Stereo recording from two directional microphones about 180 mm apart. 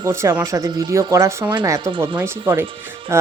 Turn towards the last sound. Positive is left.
turn(degrees=-15)  # may be behind; listen again after turning